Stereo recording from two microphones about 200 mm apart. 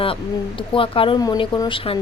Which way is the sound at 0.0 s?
25° left (ahead or behind).